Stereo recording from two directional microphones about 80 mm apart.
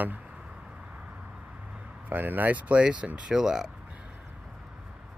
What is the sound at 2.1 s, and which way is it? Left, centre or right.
Speech, right.